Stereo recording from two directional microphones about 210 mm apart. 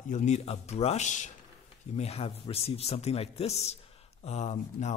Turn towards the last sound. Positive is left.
turn(degrees=30)  # may be behind; listen again after turning